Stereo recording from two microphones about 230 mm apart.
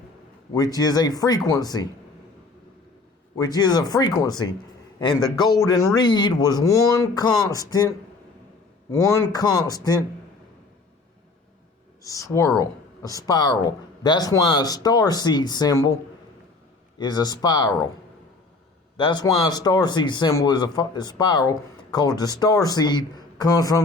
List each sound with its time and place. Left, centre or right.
0.5 s speech: centre
3.3 s speech: centre
12.0 s speech: centre
17.0 s speech: centre
18.9 s speech: centre